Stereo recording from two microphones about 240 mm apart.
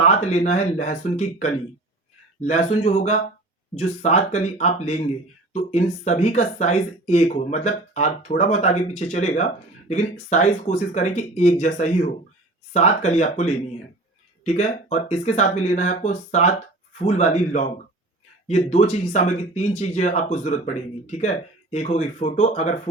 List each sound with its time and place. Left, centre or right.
0.0 s speech: left